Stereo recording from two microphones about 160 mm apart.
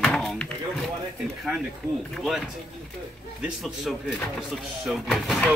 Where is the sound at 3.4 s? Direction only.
5° right (ahead or behind).